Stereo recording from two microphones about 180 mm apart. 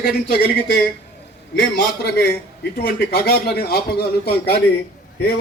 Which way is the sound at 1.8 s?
65° left (ahead or behind).